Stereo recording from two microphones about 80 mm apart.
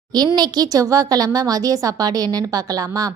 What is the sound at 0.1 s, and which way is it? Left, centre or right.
A woman's voice, right.